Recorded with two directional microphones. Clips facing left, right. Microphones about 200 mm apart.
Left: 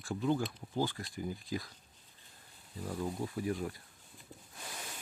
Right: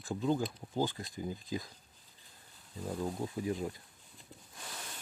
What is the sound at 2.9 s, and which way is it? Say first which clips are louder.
Speech: right 1 dB; 10° right (ahead or behind).